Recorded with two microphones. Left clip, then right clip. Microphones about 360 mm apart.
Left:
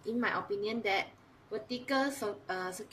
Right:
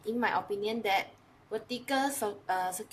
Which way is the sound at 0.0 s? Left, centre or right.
Centre.